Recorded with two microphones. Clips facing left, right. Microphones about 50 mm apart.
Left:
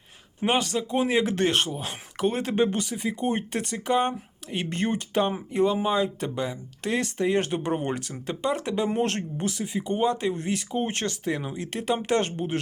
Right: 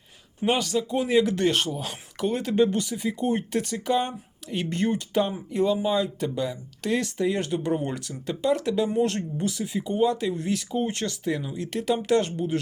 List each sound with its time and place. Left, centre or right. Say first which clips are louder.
0.4 s speech: right 1 dB; left
8.1 s speech: right 7 dB; left
8.9 s speech: right 1 dB; left
10.1 s speech: even; left